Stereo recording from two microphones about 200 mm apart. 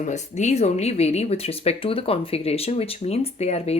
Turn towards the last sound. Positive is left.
turn(degrees=30)  # may be behind; listen again after turning